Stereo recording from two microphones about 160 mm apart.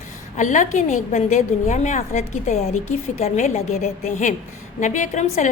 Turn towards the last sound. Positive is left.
turn(degrees=50)  # may be behind; listen again after turning